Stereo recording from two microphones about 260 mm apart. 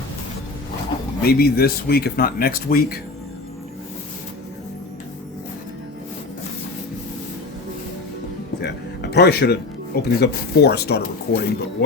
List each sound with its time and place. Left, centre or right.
1.2 s speech: left
8.6 s speech: left